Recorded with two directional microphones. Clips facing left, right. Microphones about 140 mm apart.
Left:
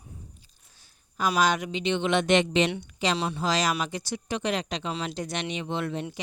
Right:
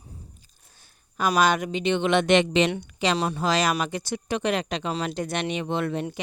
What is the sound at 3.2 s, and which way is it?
Speech, 45° right (ahead or behind).